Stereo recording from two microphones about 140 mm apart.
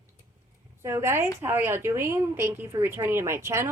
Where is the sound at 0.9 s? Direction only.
20° right (ahead or behind).